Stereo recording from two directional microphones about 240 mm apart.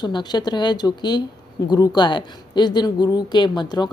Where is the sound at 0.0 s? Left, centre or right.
Centre.